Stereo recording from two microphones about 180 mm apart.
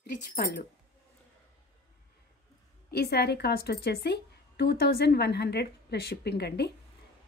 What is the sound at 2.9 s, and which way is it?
A woman's voice, 60° left (ahead or behind).